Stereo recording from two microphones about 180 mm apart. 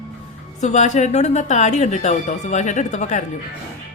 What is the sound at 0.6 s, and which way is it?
A woman's voice, 40° left (ahead or behind).